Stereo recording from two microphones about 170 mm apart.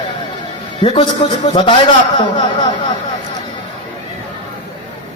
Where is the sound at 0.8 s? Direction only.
30° left (ahead or behind).